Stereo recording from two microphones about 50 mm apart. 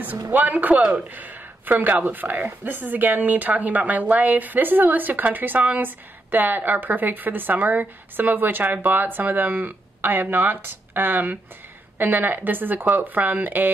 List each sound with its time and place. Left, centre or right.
0.0 s speech: right